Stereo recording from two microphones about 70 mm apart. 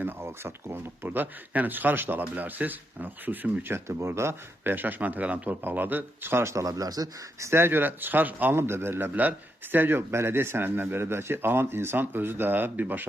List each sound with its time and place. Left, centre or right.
0.0 s speech: right
3.7 s speech: right
7.4 s speech: right
8.5 s speech: right